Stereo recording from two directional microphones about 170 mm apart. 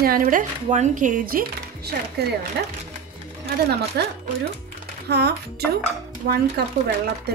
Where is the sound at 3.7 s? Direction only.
75° right (ahead or behind).